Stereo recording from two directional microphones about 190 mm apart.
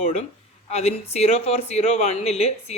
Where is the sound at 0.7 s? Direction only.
35° left (ahead or behind).